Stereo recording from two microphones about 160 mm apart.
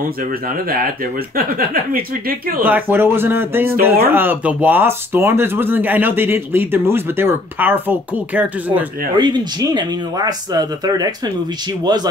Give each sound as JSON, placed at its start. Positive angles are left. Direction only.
{"t": 1.3, "sound": "speech", "side_deg": -65}
{"t": 2.6, "sound": "speech", "side_deg": -10}
{"t": 9.2, "sound": "speech", "side_deg": -25}